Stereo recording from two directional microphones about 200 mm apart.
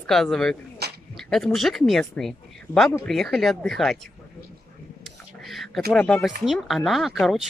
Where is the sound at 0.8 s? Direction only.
55° right (ahead or behind).